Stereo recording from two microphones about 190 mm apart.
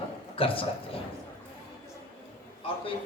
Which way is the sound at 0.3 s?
30° left (ahead or behind).